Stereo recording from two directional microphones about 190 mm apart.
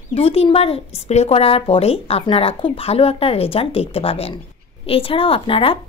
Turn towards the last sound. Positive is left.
turn(degrees=30)  # may be behind; listen again after turning